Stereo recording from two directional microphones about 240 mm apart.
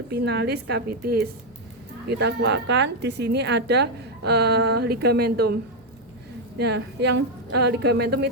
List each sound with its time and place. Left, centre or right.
0.1 s a woman's voice: right
6.6 s a woman's voice: right